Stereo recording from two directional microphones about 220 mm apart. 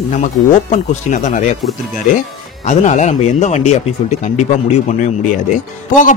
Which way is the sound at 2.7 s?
35° left (ahead or behind).